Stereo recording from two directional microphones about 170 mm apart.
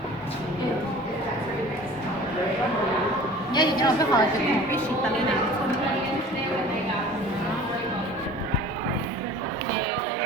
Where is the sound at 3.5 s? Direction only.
25° left (ahead or behind).